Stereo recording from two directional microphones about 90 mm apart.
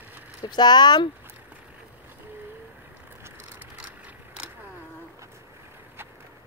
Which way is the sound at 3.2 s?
20° right (ahead or behind).